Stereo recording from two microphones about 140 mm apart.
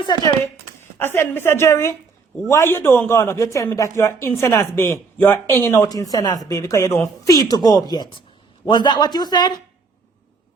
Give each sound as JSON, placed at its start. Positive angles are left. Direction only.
{"t": 0.9, "sound": "a woman's voice", "side_deg": 15}